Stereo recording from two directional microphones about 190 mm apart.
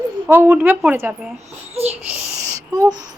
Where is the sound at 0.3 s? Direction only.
10° right (ahead or behind).